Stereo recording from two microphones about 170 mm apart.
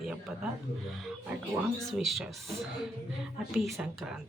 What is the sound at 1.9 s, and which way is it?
Speech, centre (ahead or behind).